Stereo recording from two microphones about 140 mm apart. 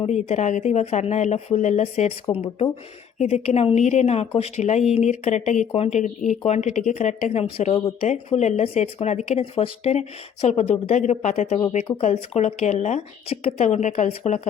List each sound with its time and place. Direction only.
0.0 s speech: 50° left (ahead or behind)
3.2 s speech: 55° left (ahead or behind)